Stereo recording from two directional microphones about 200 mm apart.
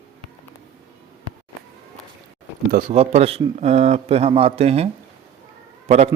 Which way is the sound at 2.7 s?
45° right (ahead or behind).